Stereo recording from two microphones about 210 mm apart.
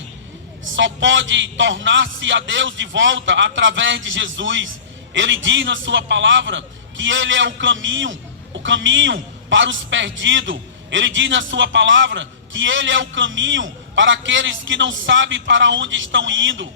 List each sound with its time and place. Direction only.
0.8 s a man's voice: 60° right (ahead or behind)